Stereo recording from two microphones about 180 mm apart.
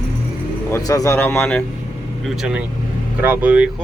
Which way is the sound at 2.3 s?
5° right (ahead or behind).